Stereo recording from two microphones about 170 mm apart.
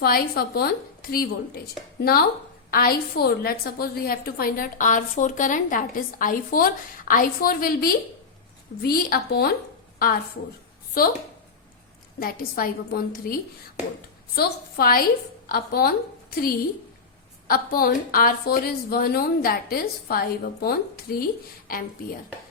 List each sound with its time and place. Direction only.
0.0 s a woman's voice: 65° left (ahead or behind)
11.0 s a woman's voice: 55° left (ahead or behind)
12.2 s a woman's voice: 60° left (ahead or behind)
14.3 s a woman's voice: 60° left (ahead or behind)
17.5 s a woman's voice: 60° left (ahead or behind)